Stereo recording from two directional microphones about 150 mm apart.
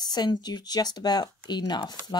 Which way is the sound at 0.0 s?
25° left (ahead or behind).